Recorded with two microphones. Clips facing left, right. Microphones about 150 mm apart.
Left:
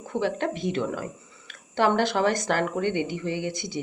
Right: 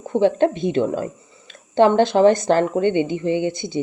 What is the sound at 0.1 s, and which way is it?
Speech, 25° right (ahead or behind).